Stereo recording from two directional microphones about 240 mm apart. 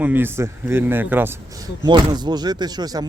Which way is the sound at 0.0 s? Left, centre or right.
Centre.